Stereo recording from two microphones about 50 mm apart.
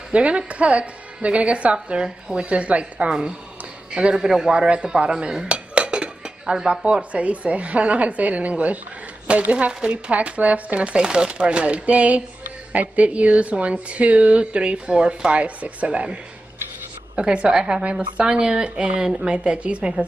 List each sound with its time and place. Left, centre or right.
0.1 s dishes: right
3.1 s speech: centre
3.9 s dishes: centre
15.4 s dishes: right